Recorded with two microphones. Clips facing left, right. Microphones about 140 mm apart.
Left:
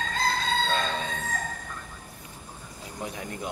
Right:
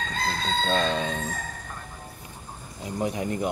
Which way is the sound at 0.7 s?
25° right (ahead or behind).